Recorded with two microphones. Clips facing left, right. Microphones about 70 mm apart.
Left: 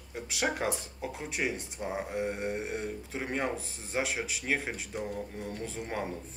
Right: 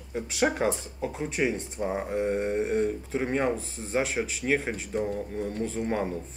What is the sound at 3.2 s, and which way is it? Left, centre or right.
Speech, centre.